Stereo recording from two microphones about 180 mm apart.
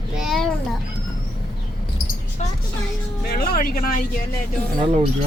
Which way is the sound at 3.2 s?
55° left (ahead or behind).